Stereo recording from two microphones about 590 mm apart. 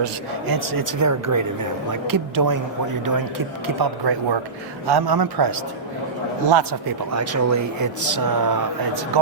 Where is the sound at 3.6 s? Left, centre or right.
Right.